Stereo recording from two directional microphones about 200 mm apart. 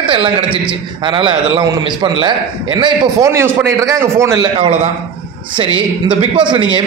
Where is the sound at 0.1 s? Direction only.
25° right (ahead or behind).